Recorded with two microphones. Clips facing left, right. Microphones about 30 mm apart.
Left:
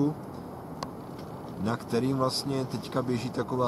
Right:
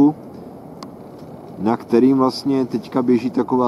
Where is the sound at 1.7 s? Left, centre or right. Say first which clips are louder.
Right 14 dB; right.